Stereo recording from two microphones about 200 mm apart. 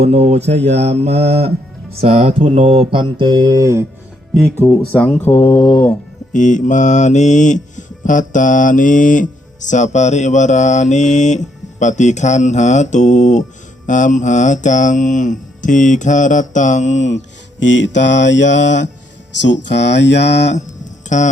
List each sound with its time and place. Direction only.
0.0 s mantra: 30° right (ahead or behind); by 3.8 s 15° right (ahead or behind)
4.4 s speech: 5° left (ahead or behind)
6.3 s mantra: 40° left (ahead or behind)
17.6 s speech: 65° left (ahead or behind)
21.1 s mantra: 35° left (ahead or behind)